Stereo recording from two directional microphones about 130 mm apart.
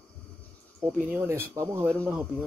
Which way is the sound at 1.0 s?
10° right (ahead or behind).